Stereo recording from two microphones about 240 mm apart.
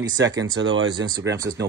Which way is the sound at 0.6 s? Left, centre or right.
Right.